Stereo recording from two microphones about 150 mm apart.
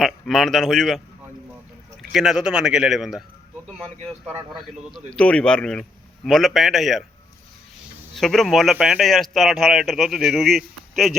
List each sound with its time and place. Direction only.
0.0 s a man's voice: centre (ahead or behind)
4.5 s a man's voice: centre (ahead or behind)
8.1 s a man's voice: centre (ahead or behind)